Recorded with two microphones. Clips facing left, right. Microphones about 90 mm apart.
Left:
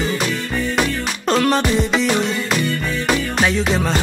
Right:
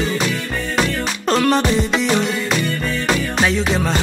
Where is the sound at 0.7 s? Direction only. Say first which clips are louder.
Even; centre (ahead or behind).